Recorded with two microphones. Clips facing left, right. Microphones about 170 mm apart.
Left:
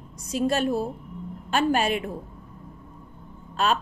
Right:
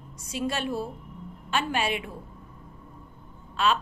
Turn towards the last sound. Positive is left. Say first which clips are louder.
# left 1 dB
turn(degrees=45)  # may be behind; listen again after turning